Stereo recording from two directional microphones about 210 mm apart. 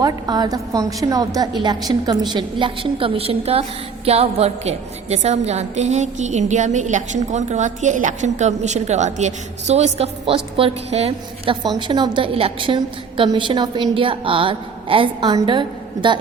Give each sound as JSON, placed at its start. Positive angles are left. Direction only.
{"t": 0.0, "sound": "a woman's voice", "side_deg": -20}